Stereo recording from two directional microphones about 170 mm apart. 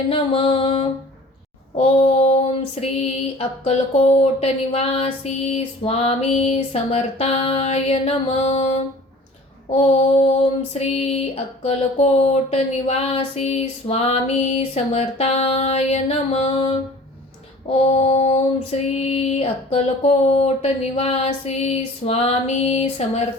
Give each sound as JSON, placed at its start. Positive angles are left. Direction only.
{"t": 0.1, "sound": "female singing", "side_deg": 35}
{"t": 9.7, "sound": "female singing", "side_deg": 35}
{"t": 17.8, "sound": "female singing", "side_deg": 40}